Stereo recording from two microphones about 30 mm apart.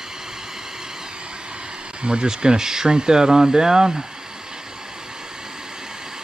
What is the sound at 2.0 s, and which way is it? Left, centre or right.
Speech, right.